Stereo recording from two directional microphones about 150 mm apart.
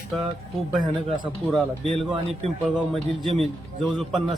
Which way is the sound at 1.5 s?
Centre (ahead or behind).